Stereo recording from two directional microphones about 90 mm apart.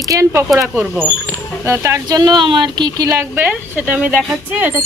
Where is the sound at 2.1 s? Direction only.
50° right (ahead or behind).